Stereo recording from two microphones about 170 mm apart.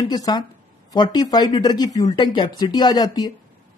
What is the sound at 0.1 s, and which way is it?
Speech, 25° left (ahead or behind).